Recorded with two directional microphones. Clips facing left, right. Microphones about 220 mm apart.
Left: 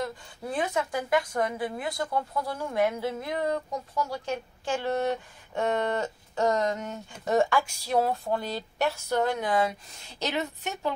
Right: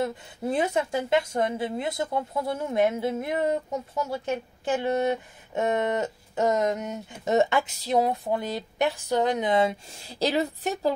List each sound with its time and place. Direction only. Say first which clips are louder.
0.0 s speech: right 5 dB; 25° right (ahead or behind)